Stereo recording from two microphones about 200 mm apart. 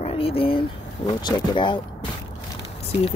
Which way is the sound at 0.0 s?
30° left (ahead or behind).